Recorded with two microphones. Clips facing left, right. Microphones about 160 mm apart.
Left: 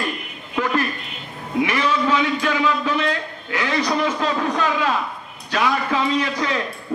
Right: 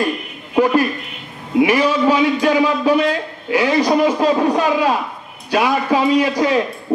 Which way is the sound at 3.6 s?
40° right (ahead or behind).